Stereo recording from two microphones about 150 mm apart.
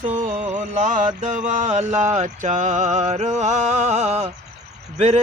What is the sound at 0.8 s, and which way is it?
Mantra, 55° right (ahead or behind).